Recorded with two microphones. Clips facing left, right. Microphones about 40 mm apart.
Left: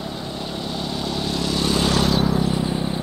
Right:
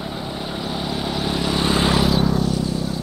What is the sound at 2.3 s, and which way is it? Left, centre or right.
Vehicle, left.